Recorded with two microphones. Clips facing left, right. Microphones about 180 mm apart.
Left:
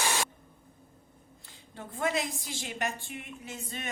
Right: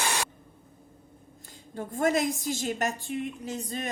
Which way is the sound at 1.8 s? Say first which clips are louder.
Right 6 dB; 45° right (ahead or behind).